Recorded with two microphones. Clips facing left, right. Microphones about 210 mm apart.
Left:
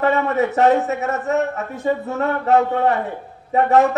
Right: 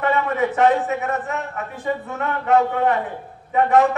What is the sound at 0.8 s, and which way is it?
A man's voice, 40° left (ahead or behind).